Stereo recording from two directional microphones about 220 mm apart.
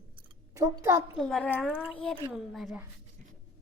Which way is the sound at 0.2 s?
15° right (ahead or behind).